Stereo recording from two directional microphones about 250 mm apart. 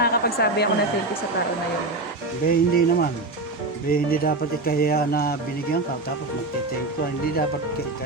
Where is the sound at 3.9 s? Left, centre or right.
Left.